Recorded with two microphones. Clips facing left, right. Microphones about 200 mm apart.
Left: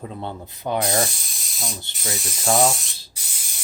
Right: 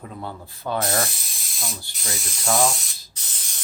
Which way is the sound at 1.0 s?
Centre (ahead or behind).